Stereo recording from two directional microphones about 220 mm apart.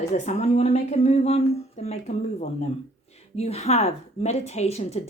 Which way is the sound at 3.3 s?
30° left (ahead or behind).